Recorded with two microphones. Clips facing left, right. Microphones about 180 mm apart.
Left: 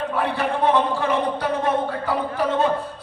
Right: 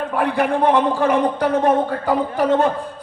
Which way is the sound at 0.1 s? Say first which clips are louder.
Right 4 dB; 45° right (ahead or behind).